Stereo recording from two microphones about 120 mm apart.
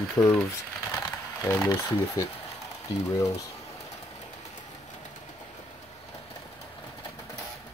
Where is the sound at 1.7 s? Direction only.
25° left (ahead or behind).